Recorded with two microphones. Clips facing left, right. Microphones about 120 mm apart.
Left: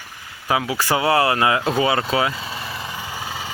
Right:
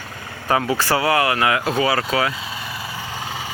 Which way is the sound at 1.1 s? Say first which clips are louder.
Left 1 dB; 30° left (ahead or behind).